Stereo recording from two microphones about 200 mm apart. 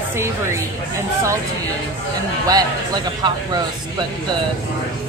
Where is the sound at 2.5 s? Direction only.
20° right (ahead or behind).